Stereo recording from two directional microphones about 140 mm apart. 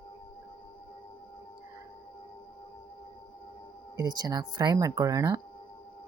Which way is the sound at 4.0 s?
30° right (ahead or behind).